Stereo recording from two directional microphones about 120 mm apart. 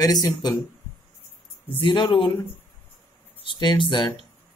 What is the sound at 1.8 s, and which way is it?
Speech, 40° left (ahead or behind).